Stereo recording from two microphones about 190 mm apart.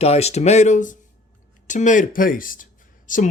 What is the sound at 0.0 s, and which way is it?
Speech, 35° left (ahead or behind).